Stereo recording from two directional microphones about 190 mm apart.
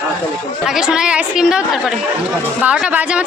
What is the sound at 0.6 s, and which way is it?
A woman's voice, centre (ahead or behind).